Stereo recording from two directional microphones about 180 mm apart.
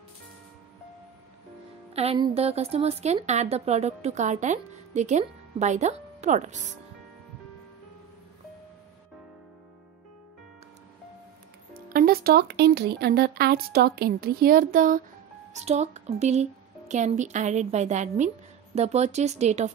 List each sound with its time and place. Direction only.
2.0 s a woman's voice: 30° right (ahead or behind)
11.9 s speech: 55° right (ahead or behind)
15.5 s a woman's voice: 40° right (ahead or behind)